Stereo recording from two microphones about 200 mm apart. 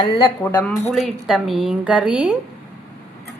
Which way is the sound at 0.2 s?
15° left (ahead or behind).